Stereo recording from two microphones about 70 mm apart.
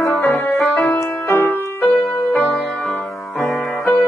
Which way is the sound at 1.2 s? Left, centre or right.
Left.